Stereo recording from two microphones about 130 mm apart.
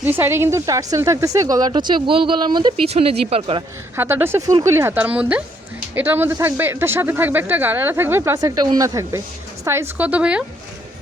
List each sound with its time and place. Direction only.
0.0 s speech: 15° right (ahead or behind); by 2.7 s 35° right (ahead or behind)
2.8 s speech: 50° right (ahead or behind)
3.9 s speech: 20° right (ahead or behind)